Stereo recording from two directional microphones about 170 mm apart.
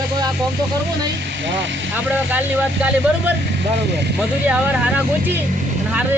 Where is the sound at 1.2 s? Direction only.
90° right.